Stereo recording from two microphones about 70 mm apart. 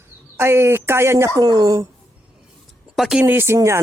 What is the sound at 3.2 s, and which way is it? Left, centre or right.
Speech, right.